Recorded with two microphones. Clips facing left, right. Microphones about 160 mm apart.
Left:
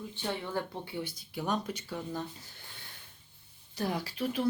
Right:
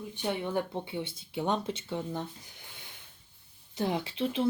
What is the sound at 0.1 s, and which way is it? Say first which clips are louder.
Speech: right 4 dB; 15° right (ahead or behind).